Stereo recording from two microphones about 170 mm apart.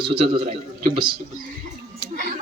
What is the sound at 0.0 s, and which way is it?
Speech, 30° right (ahead or behind).